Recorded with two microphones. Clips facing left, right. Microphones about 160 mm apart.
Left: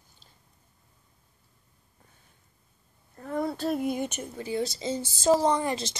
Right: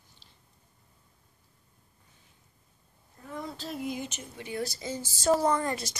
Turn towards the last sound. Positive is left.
turn(degrees=25)  # may be behind; listen again after turning